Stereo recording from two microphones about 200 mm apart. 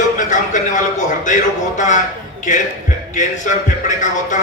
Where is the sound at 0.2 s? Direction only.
40° left (ahead or behind).